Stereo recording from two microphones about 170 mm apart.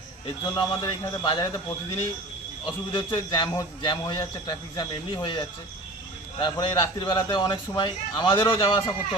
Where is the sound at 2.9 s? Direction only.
30° left (ahead or behind).